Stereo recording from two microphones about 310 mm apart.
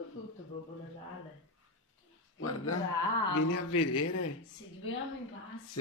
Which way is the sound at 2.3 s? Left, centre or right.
Left.